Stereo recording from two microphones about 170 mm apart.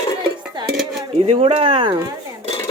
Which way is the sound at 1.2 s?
35° right (ahead or behind).